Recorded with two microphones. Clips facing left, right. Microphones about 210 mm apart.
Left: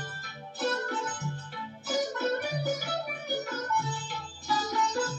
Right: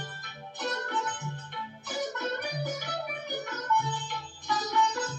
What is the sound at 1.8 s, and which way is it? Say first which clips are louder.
Music: left 4 dB; 35° left (ahead or behind).